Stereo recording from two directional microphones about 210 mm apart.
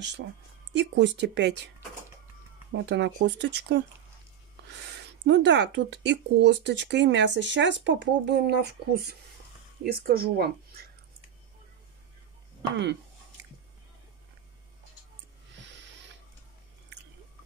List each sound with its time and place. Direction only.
0.7 s speech: 55° right (ahead or behind)
2.7 s speech: 55° right (ahead or behind)
5.0 s speech: 55° right (ahead or behind)